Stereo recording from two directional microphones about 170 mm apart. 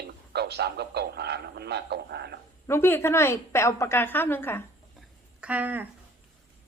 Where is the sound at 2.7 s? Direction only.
15° left (ahead or behind).